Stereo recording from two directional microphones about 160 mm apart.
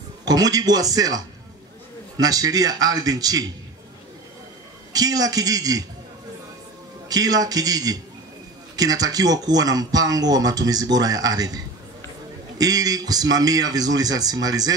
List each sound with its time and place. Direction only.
0.2 s speech: 25° right (ahead or behind)
4.9 s speech: 25° right (ahead or behind)
7.1 s speech: 25° right (ahead or behind)